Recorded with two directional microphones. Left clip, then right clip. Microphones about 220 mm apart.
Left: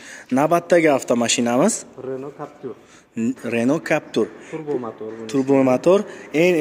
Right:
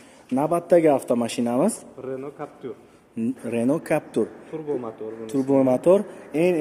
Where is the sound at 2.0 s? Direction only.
30° left (ahead or behind).